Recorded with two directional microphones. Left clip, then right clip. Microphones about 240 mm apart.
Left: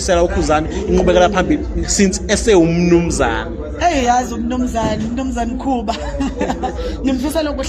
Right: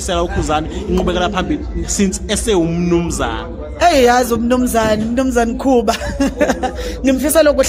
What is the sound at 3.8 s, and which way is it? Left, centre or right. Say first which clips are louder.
Speech: right 4 dB; right.